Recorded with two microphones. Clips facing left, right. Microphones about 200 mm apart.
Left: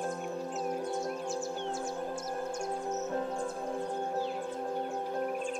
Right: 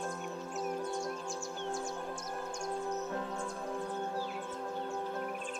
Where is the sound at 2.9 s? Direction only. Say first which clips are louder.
Left 4 dB; 30° left (ahead or behind).